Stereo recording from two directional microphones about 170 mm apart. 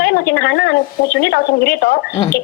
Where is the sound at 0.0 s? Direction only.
60° left (ahead or behind).